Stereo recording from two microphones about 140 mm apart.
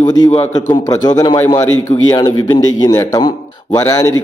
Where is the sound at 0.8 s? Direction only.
25° left (ahead or behind).